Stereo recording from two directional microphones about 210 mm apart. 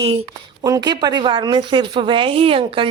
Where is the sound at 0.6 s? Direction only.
20° right (ahead or behind).